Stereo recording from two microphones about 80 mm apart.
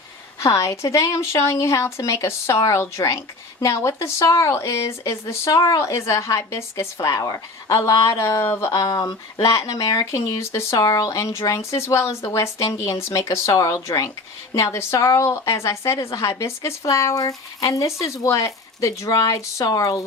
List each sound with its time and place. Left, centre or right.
0.3 s a woman's voice: left
8.7 s speech: left
10.8 s a woman's voice: left